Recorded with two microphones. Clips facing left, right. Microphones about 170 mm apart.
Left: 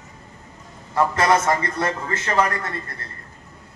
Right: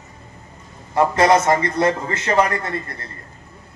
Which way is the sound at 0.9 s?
20° right (ahead or behind).